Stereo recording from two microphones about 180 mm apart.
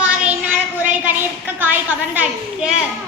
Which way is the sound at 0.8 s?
10° right (ahead or behind).